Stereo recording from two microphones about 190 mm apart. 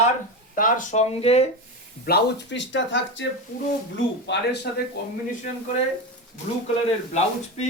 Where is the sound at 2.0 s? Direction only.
60° left (ahead or behind).